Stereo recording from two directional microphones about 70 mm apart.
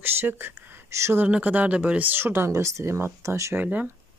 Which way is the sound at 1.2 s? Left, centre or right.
Right.